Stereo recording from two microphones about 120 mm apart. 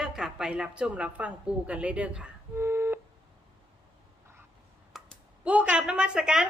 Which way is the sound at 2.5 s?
20° right (ahead or behind).